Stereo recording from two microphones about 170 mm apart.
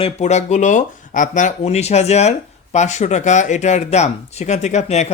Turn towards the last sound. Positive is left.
turn(degrees=40)  # may be behind; listen again after turning